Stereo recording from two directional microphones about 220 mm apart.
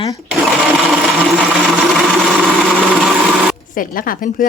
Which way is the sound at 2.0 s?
5° left (ahead or behind).